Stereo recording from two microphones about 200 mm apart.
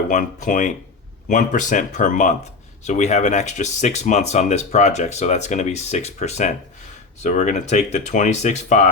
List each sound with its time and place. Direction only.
0.1 s speech: 40° left (ahead or behind)